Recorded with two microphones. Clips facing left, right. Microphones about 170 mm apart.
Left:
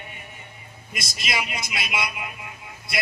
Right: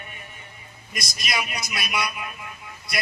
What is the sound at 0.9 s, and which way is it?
A man's voice, 25° left (ahead or behind).